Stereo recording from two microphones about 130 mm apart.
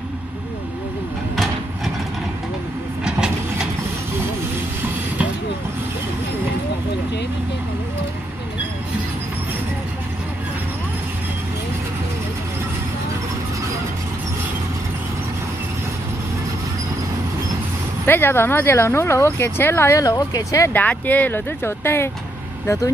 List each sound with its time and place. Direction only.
3.0 s vehicle: 5° right (ahead or behind)
18.0 s speech: 15° left (ahead or behind)
20.7 s speech: 15° left (ahead or behind)